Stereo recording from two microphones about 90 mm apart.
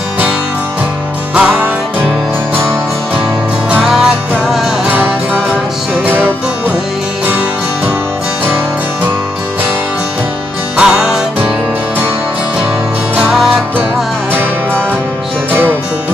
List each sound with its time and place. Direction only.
1.3 s music: 15° right (ahead or behind)
3.8 s music: 5° right (ahead or behind)
4.8 s music: 20° right (ahead or behind)
10.8 s music: 5° right (ahead or behind)
13.3 s music: 5° right (ahead or behind)